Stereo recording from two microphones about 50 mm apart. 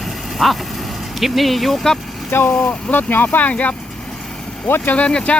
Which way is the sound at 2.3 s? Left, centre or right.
Left.